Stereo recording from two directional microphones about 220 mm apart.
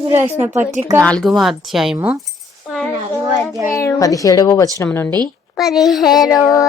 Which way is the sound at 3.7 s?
15° left (ahead or behind).